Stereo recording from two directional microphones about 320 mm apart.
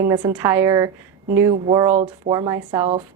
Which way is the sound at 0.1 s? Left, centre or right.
Centre.